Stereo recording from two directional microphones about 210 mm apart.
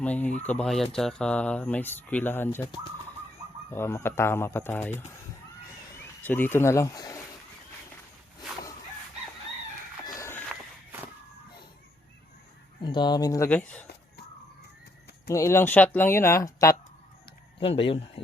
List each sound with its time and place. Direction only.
0.0 s speech: 5° left (ahead or behind)
3.7 s speech: 10° left (ahead or behind)
6.2 s speech: 10° left (ahead or behind)
10.1 s chicken: 15° left (ahead or behind)
12.8 s speech: 20° left (ahead or behind)
15.3 s speech: 15° left (ahead or behind)
17.6 s speech: 25° left (ahead or behind)